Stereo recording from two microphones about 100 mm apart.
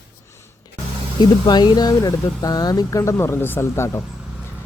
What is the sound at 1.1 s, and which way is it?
Speech, 50° left (ahead or behind).